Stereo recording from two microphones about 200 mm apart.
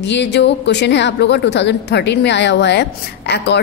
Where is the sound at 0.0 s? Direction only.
60° left (ahead or behind).